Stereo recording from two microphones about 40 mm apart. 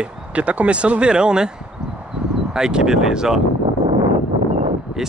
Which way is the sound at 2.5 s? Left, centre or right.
Centre.